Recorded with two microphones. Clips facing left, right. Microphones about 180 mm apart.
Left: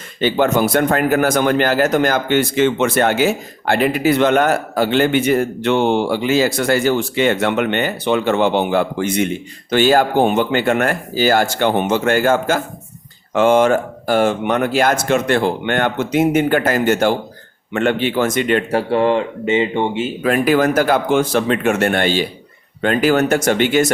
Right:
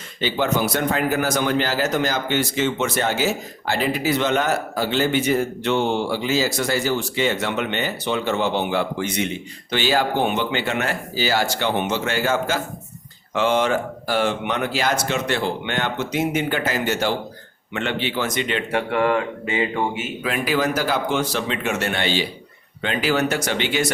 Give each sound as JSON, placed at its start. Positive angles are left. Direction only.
{"t": 0.2, "sound": "a man's voice", "side_deg": 55}
{"t": 18.8, "sound": "speech", "side_deg": 30}
{"t": 20.2, "sound": "speech", "side_deg": 50}